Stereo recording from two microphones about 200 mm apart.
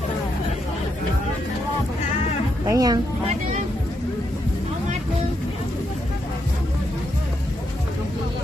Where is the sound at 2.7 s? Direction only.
20° right (ahead or behind).